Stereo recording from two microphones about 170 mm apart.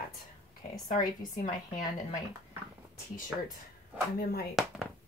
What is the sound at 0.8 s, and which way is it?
Speech, 45° left (ahead or behind).